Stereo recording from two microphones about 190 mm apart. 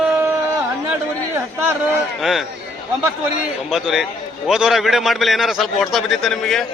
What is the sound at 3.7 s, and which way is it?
A man's voice, centre (ahead or behind).